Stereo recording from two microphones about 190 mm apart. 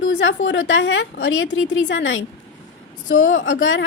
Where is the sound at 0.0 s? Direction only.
80° left.